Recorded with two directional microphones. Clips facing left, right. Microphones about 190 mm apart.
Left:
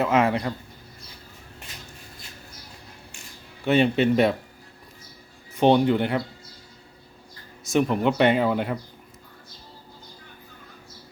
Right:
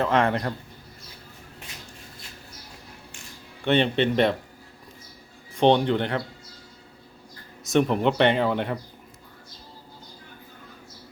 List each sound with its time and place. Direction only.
0.0 s speech: 5° left (ahead or behind)
3.6 s speech: 5° left (ahead or behind)
5.5 s speech: 5° left (ahead or behind)
7.6 s speech: centre (ahead or behind)